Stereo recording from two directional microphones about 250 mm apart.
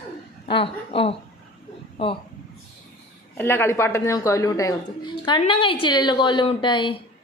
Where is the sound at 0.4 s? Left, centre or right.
Left.